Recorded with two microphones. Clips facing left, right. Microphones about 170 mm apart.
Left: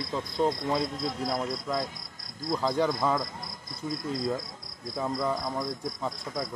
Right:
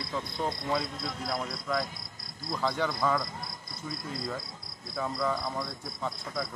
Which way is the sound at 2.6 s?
35° left (ahead or behind).